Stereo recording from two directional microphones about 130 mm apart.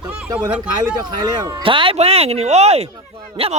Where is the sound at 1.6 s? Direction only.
45° right (ahead or behind).